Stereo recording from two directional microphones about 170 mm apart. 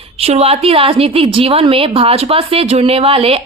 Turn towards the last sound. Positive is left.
turn(degrees=-35)  # may be behind; listen again after turning